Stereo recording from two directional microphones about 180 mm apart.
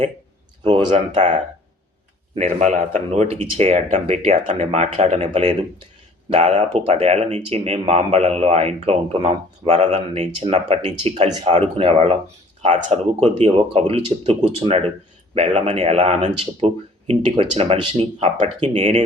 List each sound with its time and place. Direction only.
0.9 s speech: 40° right (ahead or behind)